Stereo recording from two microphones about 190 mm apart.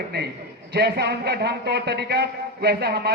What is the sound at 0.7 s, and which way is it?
A man's voice, 60° right (ahead or behind).